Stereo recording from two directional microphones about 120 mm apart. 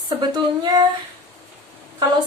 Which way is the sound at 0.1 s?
35° right (ahead or behind).